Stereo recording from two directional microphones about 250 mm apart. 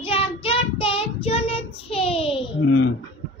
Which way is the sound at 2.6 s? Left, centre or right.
Left.